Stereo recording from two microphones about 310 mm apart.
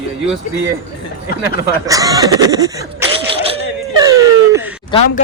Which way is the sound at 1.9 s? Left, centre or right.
Centre.